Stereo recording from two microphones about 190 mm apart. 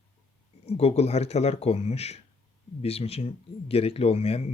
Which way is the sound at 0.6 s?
35° left (ahead or behind).